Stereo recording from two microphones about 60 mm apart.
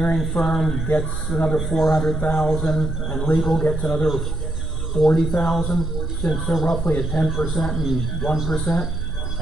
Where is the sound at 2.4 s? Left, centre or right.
Centre.